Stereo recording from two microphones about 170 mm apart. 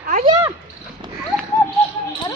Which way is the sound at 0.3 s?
20° right (ahead or behind).